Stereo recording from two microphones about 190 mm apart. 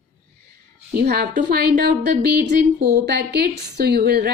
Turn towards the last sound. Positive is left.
turn(degrees=-55)  # may be behind; listen again after turning